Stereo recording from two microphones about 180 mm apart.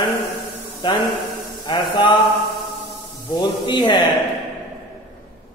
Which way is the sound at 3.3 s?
25° left (ahead or behind).